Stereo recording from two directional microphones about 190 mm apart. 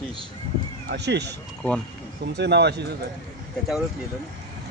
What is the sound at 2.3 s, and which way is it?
Speech, 60° right (ahead or behind).